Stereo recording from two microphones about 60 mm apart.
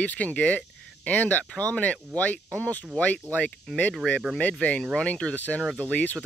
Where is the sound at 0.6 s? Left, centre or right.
Left.